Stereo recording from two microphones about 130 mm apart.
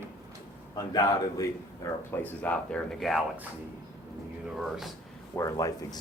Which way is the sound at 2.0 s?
15° left (ahead or behind).